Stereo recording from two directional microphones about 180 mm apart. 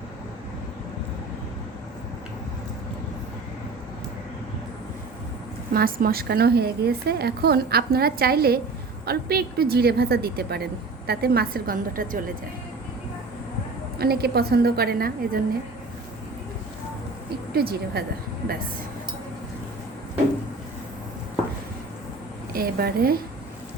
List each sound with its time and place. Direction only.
5.7 s a woman's voice: 55° right (ahead or behind)
14.0 s a woman's voice: 60° right (ahead or behind)
17.5 s a woman's voice: 60° right (ahead or behind)
22.5 s a woman's voice: 55° right (ahead or behind)